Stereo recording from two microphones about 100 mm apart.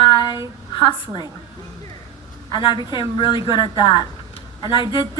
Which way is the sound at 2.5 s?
50° left (ahead or behind).